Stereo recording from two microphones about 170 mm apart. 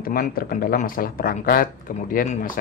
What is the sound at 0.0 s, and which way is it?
Speech, 60° left (ahead or behind).